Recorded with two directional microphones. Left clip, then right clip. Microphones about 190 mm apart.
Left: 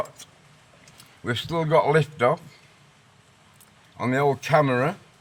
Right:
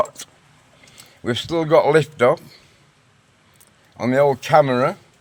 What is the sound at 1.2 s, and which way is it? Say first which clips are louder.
Speech: right 5 dB; 30° right (ahead or behind).